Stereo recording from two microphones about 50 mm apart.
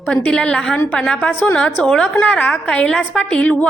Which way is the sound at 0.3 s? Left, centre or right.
Centre.